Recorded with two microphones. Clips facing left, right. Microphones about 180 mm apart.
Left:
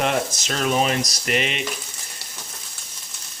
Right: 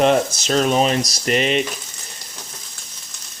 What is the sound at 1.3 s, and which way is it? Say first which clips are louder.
Frying: right 7 dB; 35° right (ahead or behind).